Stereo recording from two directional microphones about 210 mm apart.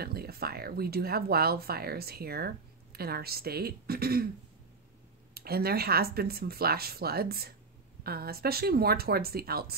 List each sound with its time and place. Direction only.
0.0 s speech: 45° right (ahead or behind)
5.3 s speech: 45° right (ahead or behind)